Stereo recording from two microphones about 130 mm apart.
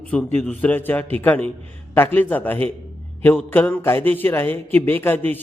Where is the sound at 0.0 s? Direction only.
10° left (ahead or behind).